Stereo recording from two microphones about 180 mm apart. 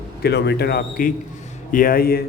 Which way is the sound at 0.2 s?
65° left (ahead or behind).